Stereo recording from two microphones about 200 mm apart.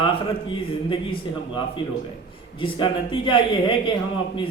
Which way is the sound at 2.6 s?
25° left (ahead or behind).